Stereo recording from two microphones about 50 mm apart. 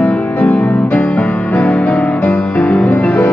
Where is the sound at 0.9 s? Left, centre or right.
Left.